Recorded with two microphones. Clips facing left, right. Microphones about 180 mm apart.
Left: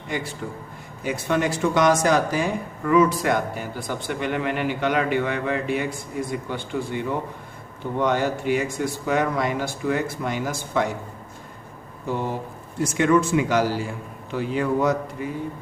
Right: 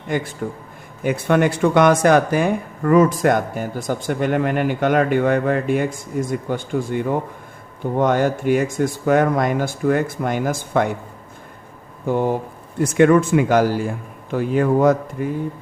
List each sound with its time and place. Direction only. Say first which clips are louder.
0.4 s speech: right 5 dB; 50° right (ahead or behind)
12.0 s speech: right 7 dB; 55° right (ahead or behind)